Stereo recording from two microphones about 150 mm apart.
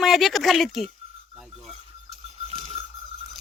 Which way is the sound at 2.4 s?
40° right (ahead or behind).